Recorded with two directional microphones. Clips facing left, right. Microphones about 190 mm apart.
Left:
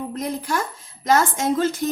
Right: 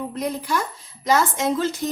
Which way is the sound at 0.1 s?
50° left (ahead or behind).